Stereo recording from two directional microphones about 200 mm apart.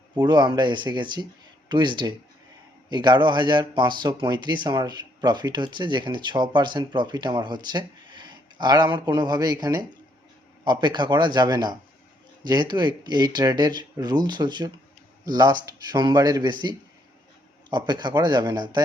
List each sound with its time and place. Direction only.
0.2 s speech: 20° right (ahead or behind)